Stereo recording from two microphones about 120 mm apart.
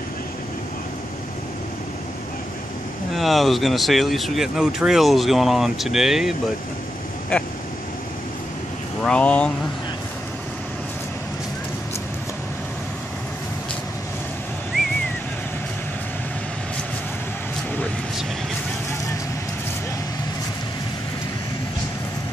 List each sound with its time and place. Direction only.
3.2 s speech: centre (ahead or behind)
9.0 s speech: 10° left (ahead or behind)